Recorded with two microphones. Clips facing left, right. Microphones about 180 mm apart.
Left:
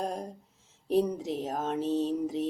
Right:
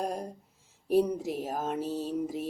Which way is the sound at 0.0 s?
5° right (ahead or behind).